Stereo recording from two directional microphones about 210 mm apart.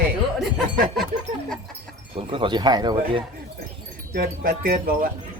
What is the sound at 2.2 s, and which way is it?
Speech, 25° right (ahead or behind).